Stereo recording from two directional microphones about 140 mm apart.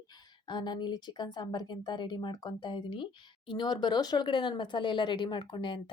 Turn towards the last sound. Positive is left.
turn(degrees=35)  # may be behind; listen again after turning